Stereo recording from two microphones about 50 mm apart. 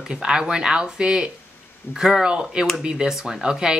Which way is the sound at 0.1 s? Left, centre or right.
Centre.